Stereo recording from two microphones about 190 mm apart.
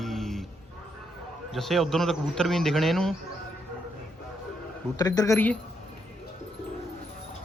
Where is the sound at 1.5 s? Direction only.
Centre (ahead or behind).